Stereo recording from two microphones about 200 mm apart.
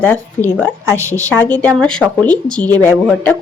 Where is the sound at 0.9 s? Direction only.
15° right (ahead or behind).